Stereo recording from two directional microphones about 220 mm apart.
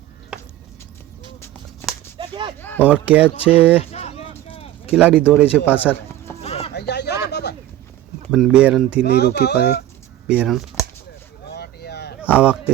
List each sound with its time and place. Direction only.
0.3 s a sound: 5° right (ahead or behind)
2.1 s whip: 20° right (ahead or behind)
2.6 s speech: 10° left (ahead or behind)
2.8 s speech: 5° right (ahead or behind)
3.9 s a sound: 30° left (ahead or behind)
4.9 s speech: 5° right (ahead or behind)
6.4 s a sound: 30° left (ahead or behind)
6.7 s a sound: 50° left (ahead or behind)
8.3 s speech: 5° right (ahead or behind)
9.0 s speech: 45° left (ahead or behind)
10.2 s speech: 5° right (ahead or behind)
11.5 s vehicle: 45° left (ahead or behind)
12.4 s speech: 5° right (ahead or behind)